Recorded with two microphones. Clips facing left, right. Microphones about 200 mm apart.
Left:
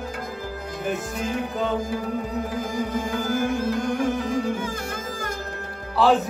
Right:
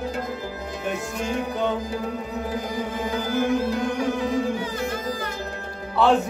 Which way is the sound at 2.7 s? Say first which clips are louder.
Left 1 dB; 50° left (ahead or behind).